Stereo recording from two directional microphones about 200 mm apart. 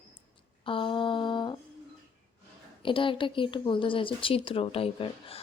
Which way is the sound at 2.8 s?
25° left (ahead or behind).